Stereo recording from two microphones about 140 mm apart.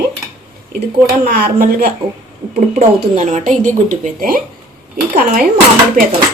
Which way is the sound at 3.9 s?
75° right (ahead or behind).